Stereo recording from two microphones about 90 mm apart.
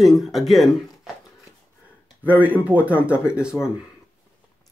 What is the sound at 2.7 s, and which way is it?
Speech, 15° right (ahead or behind).